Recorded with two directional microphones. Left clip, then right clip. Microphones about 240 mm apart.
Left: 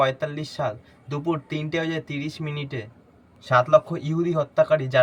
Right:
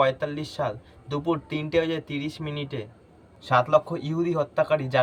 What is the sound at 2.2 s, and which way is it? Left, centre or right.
Speech, centre.